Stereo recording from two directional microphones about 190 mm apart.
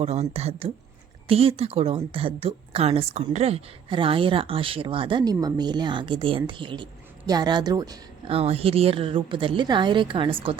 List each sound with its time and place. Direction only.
0.0 s a woman's voice: 35° right (ahead or behind)
8.4 s a woman's voice: 30° right (ahead or behind)